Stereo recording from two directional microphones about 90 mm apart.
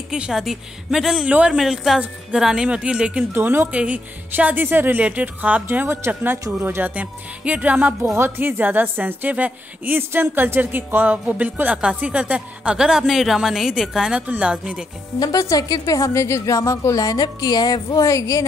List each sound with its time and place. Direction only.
0.1 s a woman's voice: 5° right (ahead or behind)
1.6 s a woman's voice: 5° right (ahead or behind)
3.3 s a woman's voice: 25° right (ahead or behind)
15.1 s a woman's voice: 40° left (ahead or behind)